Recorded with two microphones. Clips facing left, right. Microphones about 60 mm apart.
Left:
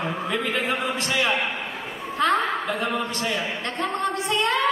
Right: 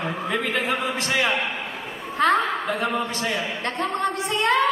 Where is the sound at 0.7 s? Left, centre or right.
Right.